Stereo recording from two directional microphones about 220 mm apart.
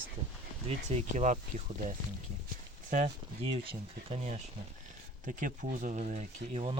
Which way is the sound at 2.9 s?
30° right (ahead or behind).